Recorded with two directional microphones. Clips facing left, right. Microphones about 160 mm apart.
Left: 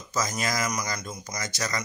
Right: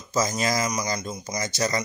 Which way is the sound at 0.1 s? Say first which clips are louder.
Right 5 dB; 25° right (ahead or behind).